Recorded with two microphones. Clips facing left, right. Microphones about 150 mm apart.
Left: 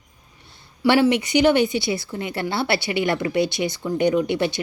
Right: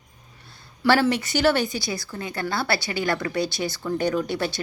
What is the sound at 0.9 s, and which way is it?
A woman's voice, 15° left (ahead or behind).